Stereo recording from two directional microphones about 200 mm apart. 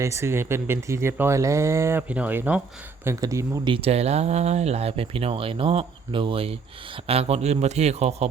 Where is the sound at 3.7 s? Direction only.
30° right (ahead or behind).